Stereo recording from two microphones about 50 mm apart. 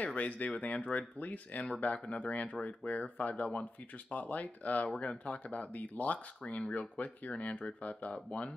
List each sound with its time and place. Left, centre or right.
0.0 s speech: left
4.8 s speech: centre